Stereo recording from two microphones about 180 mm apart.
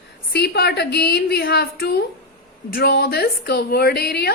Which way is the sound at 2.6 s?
60° left (ahead or behind).